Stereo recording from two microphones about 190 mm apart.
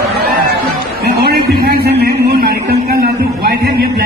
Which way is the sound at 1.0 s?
55° right (ahead or behind).